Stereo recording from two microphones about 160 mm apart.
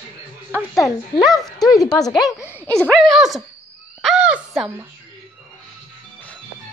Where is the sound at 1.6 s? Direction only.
25° left (ahead or behind).